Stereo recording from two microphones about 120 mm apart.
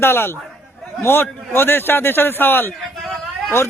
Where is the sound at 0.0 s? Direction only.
20° left (ahead or behind).